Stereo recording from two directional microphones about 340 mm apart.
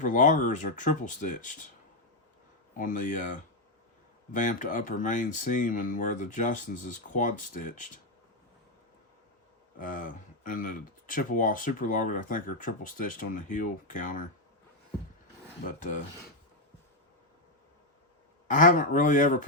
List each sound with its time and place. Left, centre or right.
0.0 s speech: left
2.7 s speech: left
9.7 s speech: left
15.6 s speech: left
18.4 s speech: left